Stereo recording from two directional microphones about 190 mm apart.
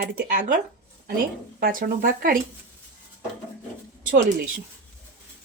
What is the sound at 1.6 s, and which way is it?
Speech, 50° right (ahead or behind).